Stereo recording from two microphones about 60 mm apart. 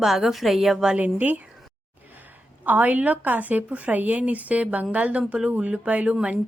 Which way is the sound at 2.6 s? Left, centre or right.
Right.